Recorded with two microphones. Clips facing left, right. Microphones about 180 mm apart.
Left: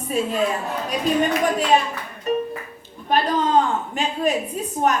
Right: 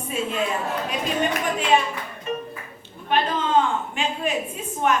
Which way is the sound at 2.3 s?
40° left (ahead or behind).